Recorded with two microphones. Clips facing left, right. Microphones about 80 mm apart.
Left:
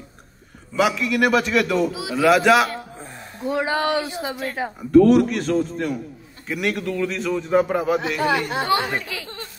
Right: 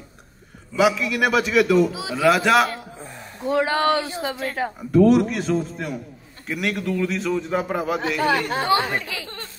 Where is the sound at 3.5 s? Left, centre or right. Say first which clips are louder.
Right 2 dB; right.